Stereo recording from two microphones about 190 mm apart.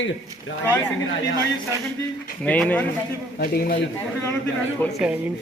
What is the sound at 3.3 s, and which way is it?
Speech, 50° left (ahead or behind).